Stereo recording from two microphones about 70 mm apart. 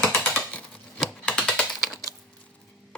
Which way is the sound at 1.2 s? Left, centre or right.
Centre.